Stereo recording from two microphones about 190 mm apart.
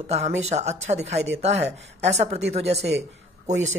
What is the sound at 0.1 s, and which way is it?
Speech, 35° right (ahead or behind).